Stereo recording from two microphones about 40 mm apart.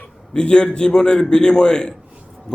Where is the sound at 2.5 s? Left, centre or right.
Left.